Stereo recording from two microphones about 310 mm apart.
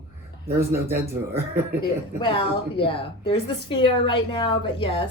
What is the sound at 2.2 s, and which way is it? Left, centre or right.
A woman's voice, centre.